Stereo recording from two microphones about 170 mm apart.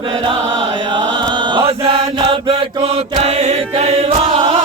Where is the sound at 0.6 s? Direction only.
30° right (ahead or behind).